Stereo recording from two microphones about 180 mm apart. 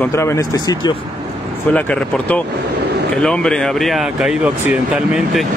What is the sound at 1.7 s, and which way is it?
Speech, 5° left (ahead or behind).